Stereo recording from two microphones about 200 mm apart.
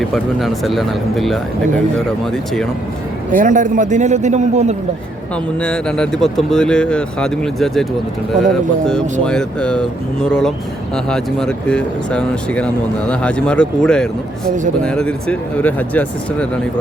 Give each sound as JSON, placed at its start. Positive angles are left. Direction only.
{"t": 0.1, "sound": "speech", "side_deg": 0}
{"t": 3.3, "sound": "a man's voice", "side_deg": -40}
{"t": 5.5, "sound": "speech", "side_deg": 5}
{"t": 9.2, "sound": "speech", "side_deg": 5}